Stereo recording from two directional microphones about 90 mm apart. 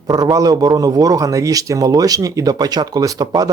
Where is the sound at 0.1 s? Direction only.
45° right (ahead or behind).